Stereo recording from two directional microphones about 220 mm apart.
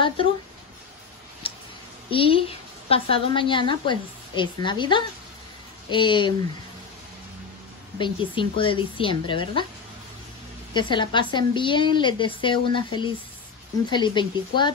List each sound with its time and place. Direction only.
2.0 s a woman's voice: 25° left (ahead or behind)
8.0 s a woman's voice: 20° left (ahead or behind)
10.7 s a woman's voice: 20° left (ahead or behind)